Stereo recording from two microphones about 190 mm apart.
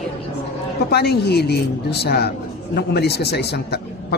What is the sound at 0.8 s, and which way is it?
A man's voice, 60° left (ahead or behind).